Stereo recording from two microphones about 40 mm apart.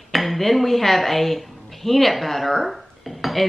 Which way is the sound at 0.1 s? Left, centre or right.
Centre.